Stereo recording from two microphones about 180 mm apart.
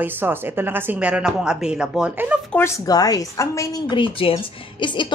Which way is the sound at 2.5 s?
15° left (ahead or behind).